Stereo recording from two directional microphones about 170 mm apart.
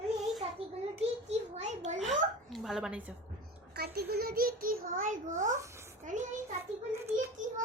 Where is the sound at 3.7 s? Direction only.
70° right (ahead or behind); by 5.6 s 50° right (ahead or behind).